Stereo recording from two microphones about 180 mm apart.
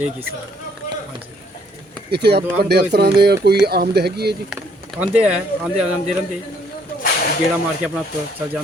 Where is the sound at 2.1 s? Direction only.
65° right (ahead or behind).